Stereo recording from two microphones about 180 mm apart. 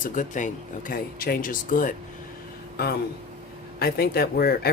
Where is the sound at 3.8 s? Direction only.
60° left (ahead or behind).